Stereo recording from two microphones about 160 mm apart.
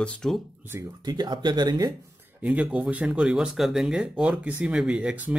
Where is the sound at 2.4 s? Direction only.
5° right (ahead or behind).